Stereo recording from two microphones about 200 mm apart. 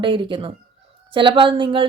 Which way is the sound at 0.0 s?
25° right (ahead or behind).